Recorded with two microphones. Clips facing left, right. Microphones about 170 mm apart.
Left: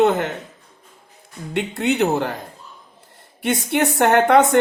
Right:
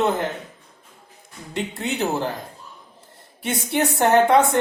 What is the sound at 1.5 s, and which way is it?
Speech, 65° left (ahead or behind).